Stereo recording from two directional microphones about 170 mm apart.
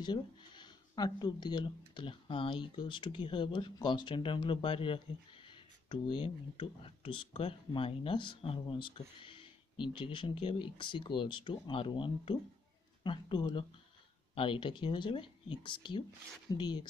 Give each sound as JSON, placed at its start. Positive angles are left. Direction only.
{"t": 0.0, "sound": "speech", "side_deg": 25}